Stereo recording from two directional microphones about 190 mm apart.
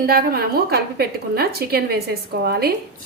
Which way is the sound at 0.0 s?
55° right (ahead or behind).